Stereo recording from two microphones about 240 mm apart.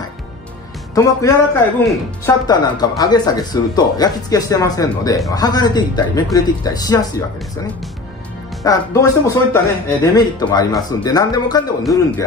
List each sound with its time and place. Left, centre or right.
0.9 s speech: centre
8.6 s speech: centre